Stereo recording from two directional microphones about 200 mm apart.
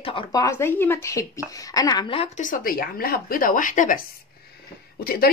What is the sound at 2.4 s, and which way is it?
Speech, 45° left (ahead or behind).